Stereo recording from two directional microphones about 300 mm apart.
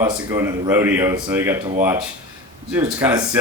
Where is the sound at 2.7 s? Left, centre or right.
Centre.